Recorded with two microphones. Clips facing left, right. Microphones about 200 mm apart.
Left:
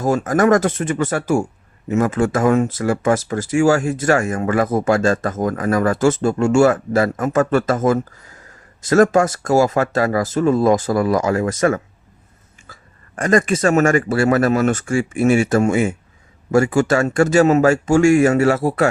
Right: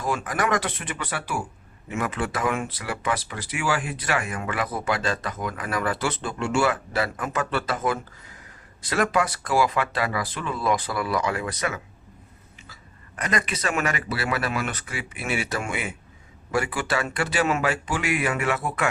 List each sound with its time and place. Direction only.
0.0 s speech: 45° left (ahead or behind)